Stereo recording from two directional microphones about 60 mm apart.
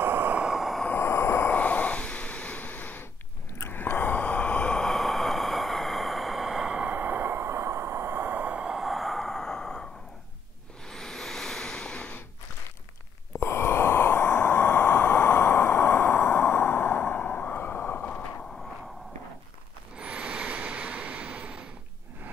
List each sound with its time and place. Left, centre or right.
0.0 s vehicle: right
0.5 s train: centre
0.9 s vehicle: left
1.5 s snort: left
3.5 s a sound: left; by 6.7 s centre
6.7 s sigh: right
7.0 s a sound: right
8.6 s gasp: centre
10.9 s vehicle: centre
13.4 s a sound: left
20.0 s vehicle: right